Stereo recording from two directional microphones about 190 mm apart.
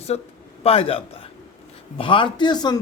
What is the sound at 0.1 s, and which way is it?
A man's voice, 35° left (ahead or behind).